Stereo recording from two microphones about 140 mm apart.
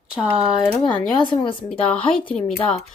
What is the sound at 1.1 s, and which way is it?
Speech, 35° left (ahead or behind).